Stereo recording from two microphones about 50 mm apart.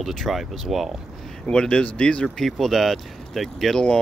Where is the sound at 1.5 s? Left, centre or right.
Left.